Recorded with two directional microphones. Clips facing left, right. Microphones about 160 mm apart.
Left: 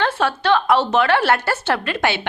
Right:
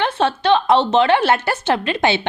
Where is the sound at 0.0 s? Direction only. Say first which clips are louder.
Right 2 dB; 20° right (ahead or behind).